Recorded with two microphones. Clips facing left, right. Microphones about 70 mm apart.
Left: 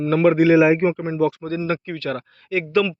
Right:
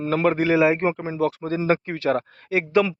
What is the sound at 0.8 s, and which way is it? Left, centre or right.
Speech, centre.